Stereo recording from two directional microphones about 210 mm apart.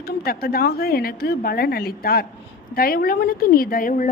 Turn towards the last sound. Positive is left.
turn(degrees=40)  # may be behind; listen again after turning